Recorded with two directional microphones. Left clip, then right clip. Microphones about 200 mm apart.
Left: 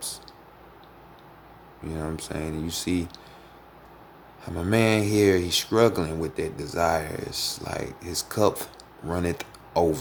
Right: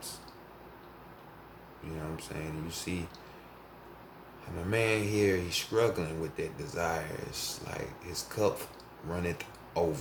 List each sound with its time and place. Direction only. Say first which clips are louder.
2.1 s speech: left 8 dB; 50° left (ahead or behind)
4.7 s speech: left 7 dB; 50° left (ahead or behind)